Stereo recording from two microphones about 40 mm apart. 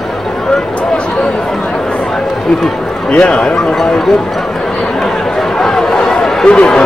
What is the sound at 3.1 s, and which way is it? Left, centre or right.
Speech, left.